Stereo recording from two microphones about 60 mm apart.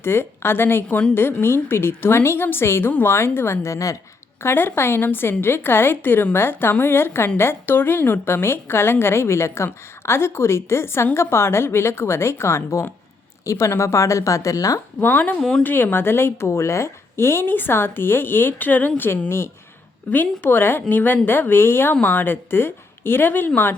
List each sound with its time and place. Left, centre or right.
0.0 s a woman's voice: left
0.9 s a woman's voice: left
1.1 s a woman's voice: left
4.4 s a woman's voice: left
15.0 s a woman's voice: left
15.4 s a woman's voice: centre
15.6 s a woman's voice: left